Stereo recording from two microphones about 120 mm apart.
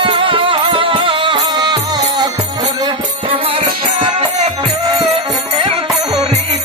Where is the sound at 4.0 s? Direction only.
50° right (ahead or behind).